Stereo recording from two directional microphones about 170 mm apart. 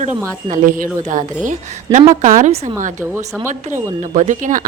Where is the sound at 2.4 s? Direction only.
45° right (ahead or behind).